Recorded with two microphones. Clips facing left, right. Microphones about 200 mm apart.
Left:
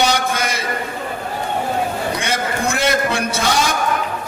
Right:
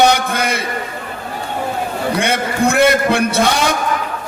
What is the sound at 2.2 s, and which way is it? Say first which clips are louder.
Music: right 5 dB; 60° right (ahead or behind).